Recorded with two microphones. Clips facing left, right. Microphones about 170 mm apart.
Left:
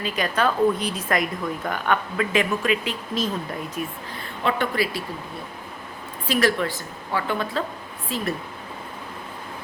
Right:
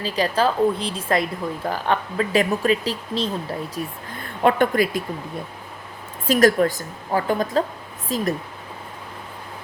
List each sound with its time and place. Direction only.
0.0 s speech: 30° right (ahead or behind)
4.1 s a woman's voice: 50° right (ahead or behind)
6.2 s a woman's voice: 45° right (ahead or behind)